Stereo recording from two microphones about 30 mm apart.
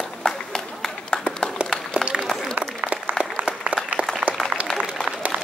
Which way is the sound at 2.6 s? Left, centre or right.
Right.